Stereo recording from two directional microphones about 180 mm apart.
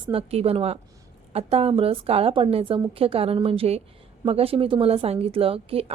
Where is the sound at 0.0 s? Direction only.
30° right (ahead or behind).